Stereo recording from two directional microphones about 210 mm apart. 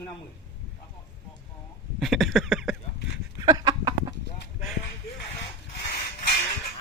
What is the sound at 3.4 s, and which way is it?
Chicken, 20° right (ahead or behind).